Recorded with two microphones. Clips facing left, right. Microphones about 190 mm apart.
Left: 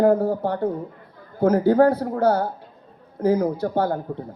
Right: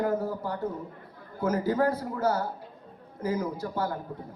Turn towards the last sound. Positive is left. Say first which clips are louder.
# left 8 dB
turn(degrees=65)  # may be behind; listen again after turning